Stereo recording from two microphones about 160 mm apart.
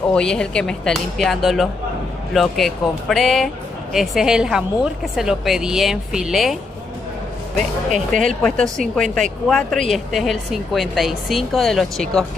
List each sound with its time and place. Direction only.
0.1 s a woman's voice: 5° left (ahead or behind)
7.9 s speech: 55° right (ahead or behind)
8.4 s a woman's voice: 5° left (ahead or behind)